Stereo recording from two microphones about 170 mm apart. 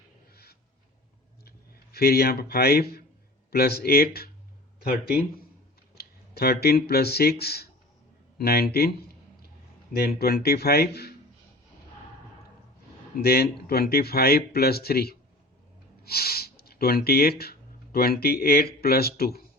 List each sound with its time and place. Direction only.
1.5 s speech: 65° left (ahead or behind)
13.2 s speech: 65° left (ahead or behind)